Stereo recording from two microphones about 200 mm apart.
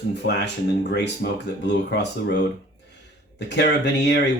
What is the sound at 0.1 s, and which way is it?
Speech, 60° left (ahead or behind).